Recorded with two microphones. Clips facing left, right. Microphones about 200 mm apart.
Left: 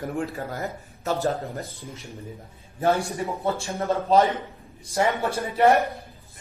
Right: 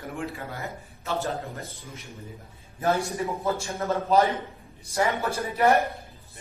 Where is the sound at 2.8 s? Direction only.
30° left (ahead or behind).